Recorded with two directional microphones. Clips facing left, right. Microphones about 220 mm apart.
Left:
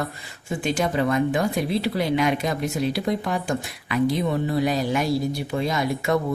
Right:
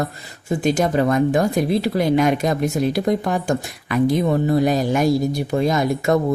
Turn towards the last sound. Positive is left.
turn(degrees=-45)  # may be behind; listen again after turning